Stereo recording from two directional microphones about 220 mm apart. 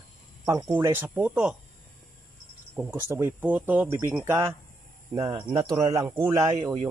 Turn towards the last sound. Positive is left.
turn(degrees=-15)  # may be behind; listen again after turning